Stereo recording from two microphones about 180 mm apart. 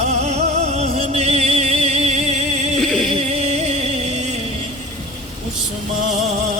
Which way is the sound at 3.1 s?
35° right (ahead or behind).